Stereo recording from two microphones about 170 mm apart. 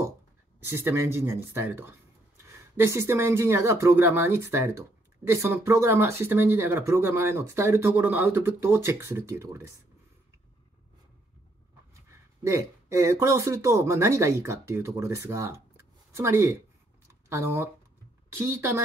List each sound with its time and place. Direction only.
0.7 s speech: 15° right (ahead or behind)
12.4 s speech: 15° right (ahead or behind)